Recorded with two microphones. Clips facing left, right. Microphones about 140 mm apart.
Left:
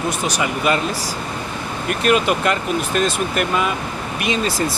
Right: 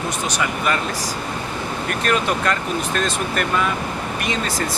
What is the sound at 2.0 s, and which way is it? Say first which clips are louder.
Speech: left 4 dB; 15° left (ahead or behind).